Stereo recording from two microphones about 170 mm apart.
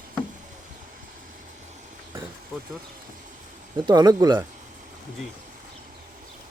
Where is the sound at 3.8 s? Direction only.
25° right (ahead or behind).